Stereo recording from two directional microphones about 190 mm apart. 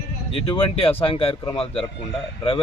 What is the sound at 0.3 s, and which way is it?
Speech, 30° left (ahead or behind).